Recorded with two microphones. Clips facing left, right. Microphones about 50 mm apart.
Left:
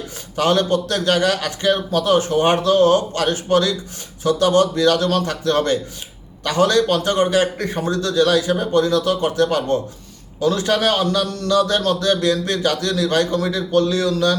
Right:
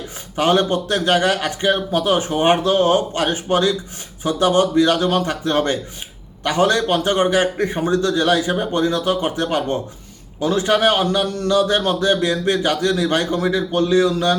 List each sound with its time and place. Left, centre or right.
0.3 s a man's voice: right